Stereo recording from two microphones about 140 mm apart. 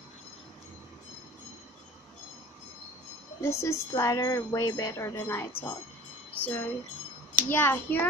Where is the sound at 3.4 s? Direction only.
20° left (ahead or behind).